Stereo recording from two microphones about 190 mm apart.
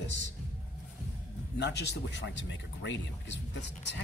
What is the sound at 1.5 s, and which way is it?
Speech, 65° left (ahead or behind).